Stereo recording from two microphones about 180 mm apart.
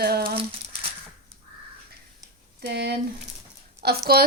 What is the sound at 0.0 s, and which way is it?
Speech, 55° right (ahead or behind).